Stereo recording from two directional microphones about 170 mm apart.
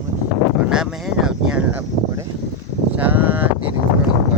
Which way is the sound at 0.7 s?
5° right (ahead or behind).